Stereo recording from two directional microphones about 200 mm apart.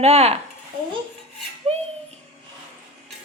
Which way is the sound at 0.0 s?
30° right (ahead or behind).